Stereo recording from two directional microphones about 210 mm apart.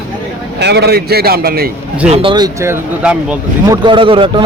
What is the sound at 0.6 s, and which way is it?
A man's voice, 50° right (ahead or behind).